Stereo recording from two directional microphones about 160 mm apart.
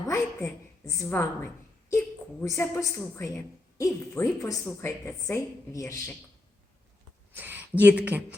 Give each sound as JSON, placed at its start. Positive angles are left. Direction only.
{"t": 0.1, "sound": "a woman's voice", "side_deg": 20}
{"t": 7.3, "sound": "speech", "side_deg": -10}